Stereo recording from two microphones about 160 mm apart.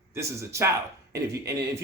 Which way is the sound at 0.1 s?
20° right (ahead or behind).